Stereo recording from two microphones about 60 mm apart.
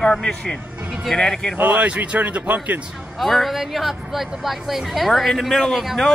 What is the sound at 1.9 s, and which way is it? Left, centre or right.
Speech, right.